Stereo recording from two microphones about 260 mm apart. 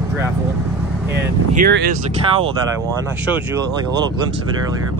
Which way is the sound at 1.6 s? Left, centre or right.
Right.